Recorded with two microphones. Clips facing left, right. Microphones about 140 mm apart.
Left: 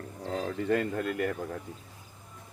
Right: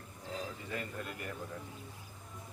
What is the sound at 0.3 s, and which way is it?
Speech, 65° left (ahead or behind).